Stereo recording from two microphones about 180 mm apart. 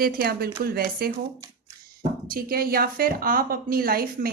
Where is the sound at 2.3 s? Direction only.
55° right (ahead or behind).